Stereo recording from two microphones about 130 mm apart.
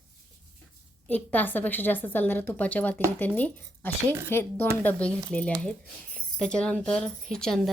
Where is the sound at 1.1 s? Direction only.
15° left (ahead or behind).